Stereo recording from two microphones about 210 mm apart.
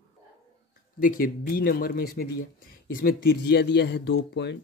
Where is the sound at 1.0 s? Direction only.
45° left (ahead or behind).